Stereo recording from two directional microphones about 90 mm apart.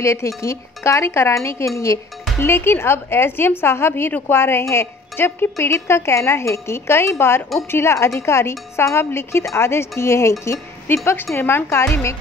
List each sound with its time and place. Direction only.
0.0 s a woman's voice: 35° left (ahead or behind)